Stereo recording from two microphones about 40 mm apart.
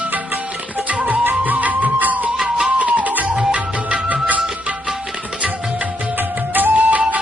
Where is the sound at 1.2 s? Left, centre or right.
Right.